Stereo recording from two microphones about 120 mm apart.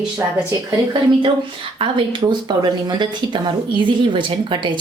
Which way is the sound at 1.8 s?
45° right (ahead or behind).